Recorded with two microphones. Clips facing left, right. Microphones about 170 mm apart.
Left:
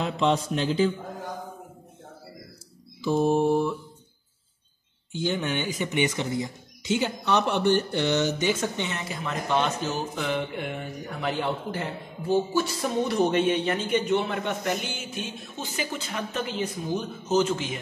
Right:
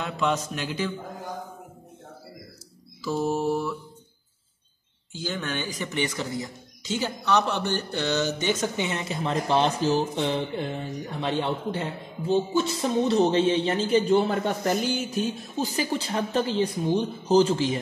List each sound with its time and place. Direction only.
0.0 s speech: 25° left (ahead or behind)
3.0 s speech: 25° left (ahead or behind)
5.1 s speech: 20° left (ahead or behind)
8.9 s speech: 30° right (ahead or behind)